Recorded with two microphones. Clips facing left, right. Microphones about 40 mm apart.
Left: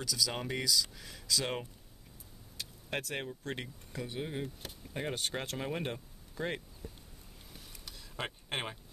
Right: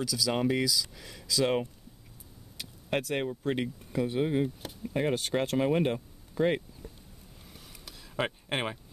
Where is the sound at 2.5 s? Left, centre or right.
Centre.